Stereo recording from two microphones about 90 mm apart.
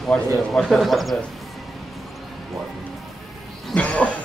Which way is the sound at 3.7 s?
15° left (ahead or behind).